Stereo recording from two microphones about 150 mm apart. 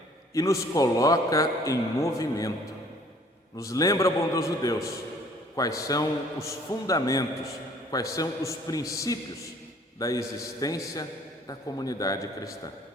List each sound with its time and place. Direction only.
0.3 s a man's voice: 20° left (ahead or behind)
3.6 s a man's voice: 20° left (ahead or behind)